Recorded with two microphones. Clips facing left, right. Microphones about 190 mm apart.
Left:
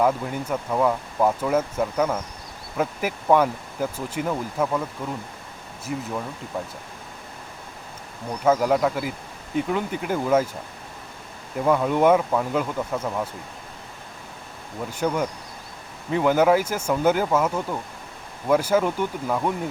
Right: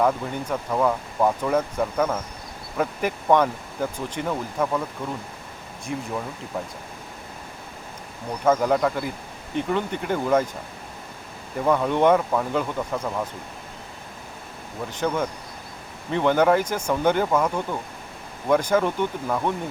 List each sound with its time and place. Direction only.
0.0 s speech: 5° left (ahead or behind)
8.4 s speech: 5° left (ahead or behind)
11.6 s speech: 5° left (ahead or behind)
14.8 s speech: 10° left (ahead or behind)